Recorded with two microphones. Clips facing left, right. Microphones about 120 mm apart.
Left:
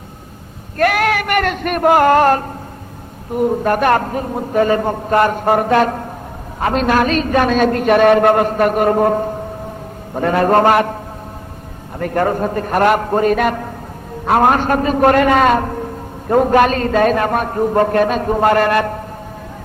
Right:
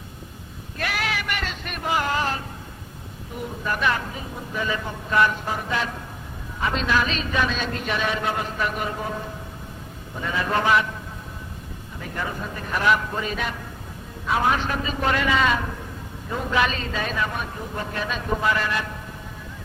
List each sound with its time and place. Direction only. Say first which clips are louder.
0.8 s a woman's voice: left 13 dB; 50° left (ahead or behind)
11.9 s a man's voice: left 14 dB; 60° left (ahead or behind)